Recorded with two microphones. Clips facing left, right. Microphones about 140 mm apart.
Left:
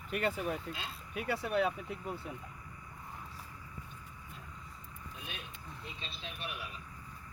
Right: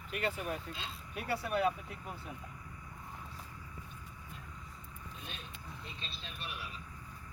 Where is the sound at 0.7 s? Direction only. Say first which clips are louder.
Left 2 dB; 10° left (ahead or behind).